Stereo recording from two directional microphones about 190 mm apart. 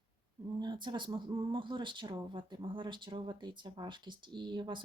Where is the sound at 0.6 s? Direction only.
25° right (ahead or behind).